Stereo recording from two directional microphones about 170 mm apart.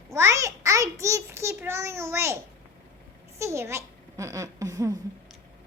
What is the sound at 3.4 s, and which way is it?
A child's voice, 15° right (ahead or behind).